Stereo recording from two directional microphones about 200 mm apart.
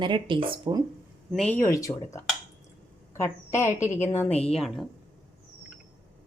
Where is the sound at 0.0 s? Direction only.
25° right (ahead or behind).